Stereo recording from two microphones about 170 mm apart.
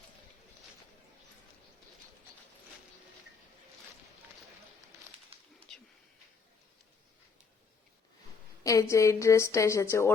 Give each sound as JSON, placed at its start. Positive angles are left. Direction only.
{"t": 8.6, "sound": "a woman's voice", "side_deg": 20}